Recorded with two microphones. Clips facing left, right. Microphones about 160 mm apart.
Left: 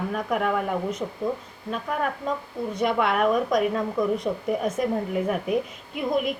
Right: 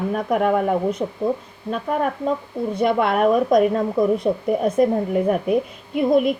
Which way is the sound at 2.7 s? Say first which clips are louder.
Right 4 dB; 35° right (ahead or behind).